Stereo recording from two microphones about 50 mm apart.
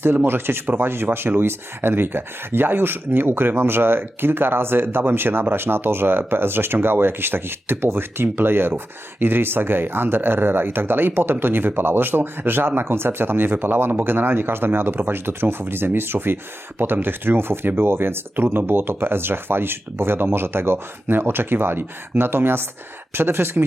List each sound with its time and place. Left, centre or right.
0.0 s speech: right